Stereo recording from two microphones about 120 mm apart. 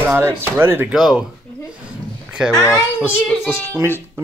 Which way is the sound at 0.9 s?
Centre (ahead or behind).